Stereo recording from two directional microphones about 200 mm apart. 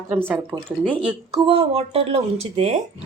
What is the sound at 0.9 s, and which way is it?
Speech, centre (ahead or behind).